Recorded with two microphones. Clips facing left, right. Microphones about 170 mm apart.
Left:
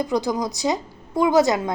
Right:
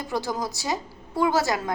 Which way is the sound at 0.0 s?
15° left (ahead or behind).